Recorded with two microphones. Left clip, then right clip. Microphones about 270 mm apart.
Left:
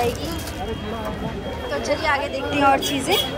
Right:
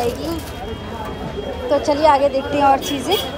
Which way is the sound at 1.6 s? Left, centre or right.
Centre.